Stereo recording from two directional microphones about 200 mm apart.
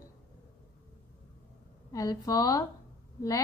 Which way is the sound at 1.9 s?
15° left (ahead or behind).